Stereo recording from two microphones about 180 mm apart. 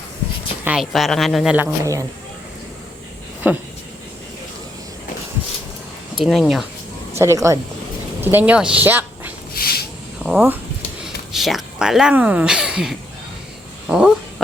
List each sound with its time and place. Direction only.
0.6 s speech: 5° right (ahead or behind)
1.8 s speech: 15° right (ahead or behind)
3.4 s speech: 10° right (ahead or behind)
6.2 s speech: centre (ahead or behind)
7.2 s speech: 15° right (ahead or behind)
9.6 s a sound: 55° left (ahead or behind)
10.2 s speech: 10° right (ahead or behind)
13.8 s a sound: 5° right (ahead or behind)